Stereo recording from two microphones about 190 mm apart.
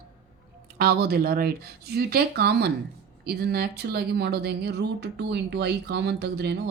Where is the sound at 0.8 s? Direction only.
55° right (ahead or behind).